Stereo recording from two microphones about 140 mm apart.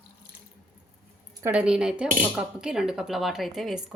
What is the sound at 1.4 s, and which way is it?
Speech, 10° right (ahead or behind).